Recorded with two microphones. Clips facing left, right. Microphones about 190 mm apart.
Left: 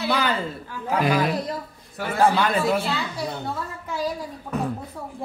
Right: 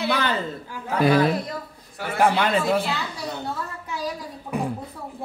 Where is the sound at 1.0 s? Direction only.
30° right (ahead or behind).